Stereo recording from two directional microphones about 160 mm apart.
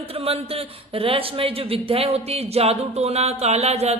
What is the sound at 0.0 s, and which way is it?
Speech, 35° right (ahead or behind).